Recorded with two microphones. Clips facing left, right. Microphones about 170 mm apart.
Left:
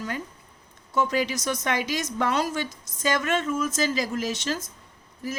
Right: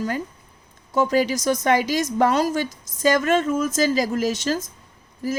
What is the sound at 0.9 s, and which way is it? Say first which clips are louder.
A woman's voice: right 5 dB; 40° right (ahead or behind).